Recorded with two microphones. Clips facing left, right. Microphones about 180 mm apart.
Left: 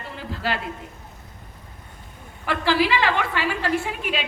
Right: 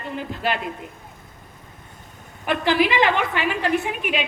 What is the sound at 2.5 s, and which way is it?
A woman's voice, 20° right (ahead or behind).